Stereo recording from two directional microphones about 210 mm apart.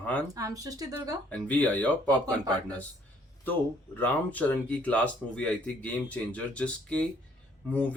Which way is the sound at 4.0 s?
10° left (ahead or behind).